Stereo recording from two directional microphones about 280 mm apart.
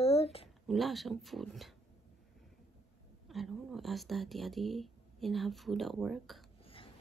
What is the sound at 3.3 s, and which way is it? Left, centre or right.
Speech, centre.